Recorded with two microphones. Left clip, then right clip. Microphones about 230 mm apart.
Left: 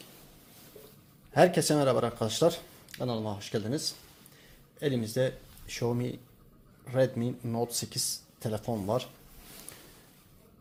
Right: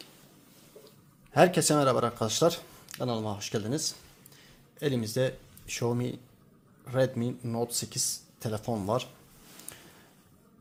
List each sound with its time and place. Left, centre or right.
1.3 s speech: centre